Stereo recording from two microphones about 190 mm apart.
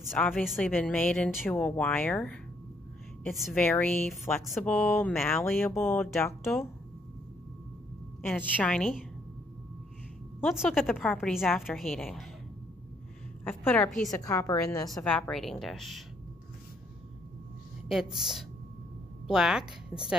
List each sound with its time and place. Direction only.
0.0 s a woman's voice: centre (ahead or behind)
5.4 s speech: 15° left (ahead or behind)
8.3 s a woman's voice: 5° left (ahead or behind)
10.4 s a woman's voice: centre (ahead or behind)
13.4 s a woman's voice: 10° left (ahead or behind)
14.9 s a woman's voice: 5° left (ahead or behind)
17.8 s a woman's voice: centre (ahead or behind)